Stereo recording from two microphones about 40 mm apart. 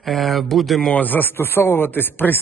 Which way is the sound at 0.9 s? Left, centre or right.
Left.